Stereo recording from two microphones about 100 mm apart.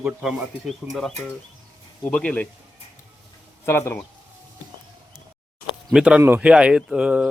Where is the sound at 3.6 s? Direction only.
25° left (ahead or behind).